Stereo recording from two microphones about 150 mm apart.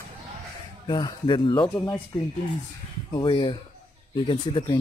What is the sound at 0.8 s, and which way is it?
Speech, 30° left (ahead or behind).